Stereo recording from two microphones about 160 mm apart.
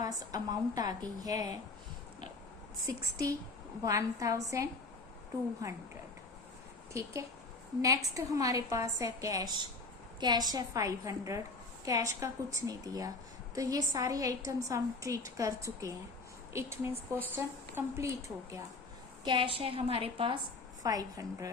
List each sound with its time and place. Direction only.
0.0 s a woman's voice: 25° right (ahead or behind)
2.8 s a woman's voice: 20° right (ahead or behind)
6.9 s a woman's voice: 20° right (ahead or behind)
19.2 s a woman's voice: 30° right (ahead or behind)
20.8 s a woman's voice: 20° right (ahead or behind)